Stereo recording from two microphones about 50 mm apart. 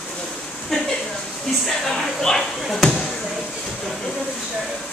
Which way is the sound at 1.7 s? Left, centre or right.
Centre.